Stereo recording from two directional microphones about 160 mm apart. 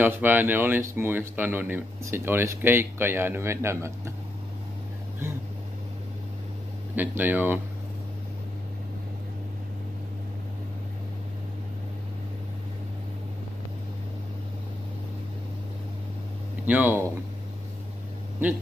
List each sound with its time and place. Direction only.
0.0 s speech: 10° right (ahead or behind)
5.2 s vehicle: 15° right (ahead or behind)
7.0 s speech: 10° right (ahead or behind)
16.6 s speech: 10° right (ahead or behind)